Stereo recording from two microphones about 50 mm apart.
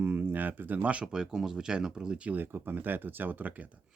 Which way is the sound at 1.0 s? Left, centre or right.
Centre.